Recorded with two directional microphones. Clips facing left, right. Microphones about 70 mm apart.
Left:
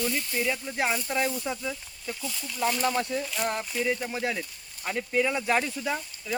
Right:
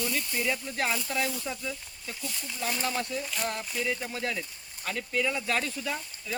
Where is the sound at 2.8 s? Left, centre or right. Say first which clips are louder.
Left 5 dB; left.